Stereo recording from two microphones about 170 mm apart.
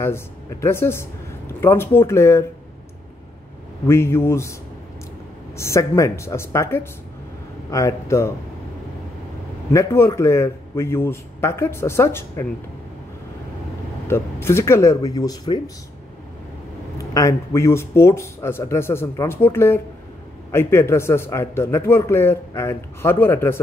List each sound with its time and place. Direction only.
0.0 s a man's voice: 15° left (ahead or behind)
3.8 s a man's voice: 15° left (ahead or behind)
5.6 s a man's voice: 15° left (ahead or behind)
9.7 s a man's voice: 15° left (ahead or behind)
14.0 s speech: 15° left (ahead or behind)
17.0 s a man's voice: 20° left (ahead or behind)